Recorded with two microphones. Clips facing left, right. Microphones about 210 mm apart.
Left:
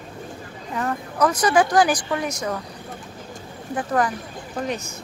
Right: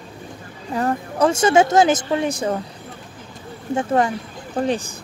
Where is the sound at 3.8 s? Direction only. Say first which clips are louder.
Right 3 dB; 25° right (ahead or behind).